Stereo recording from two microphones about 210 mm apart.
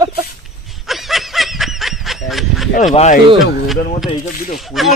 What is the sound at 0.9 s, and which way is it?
Snicker, centre (ahead or behind).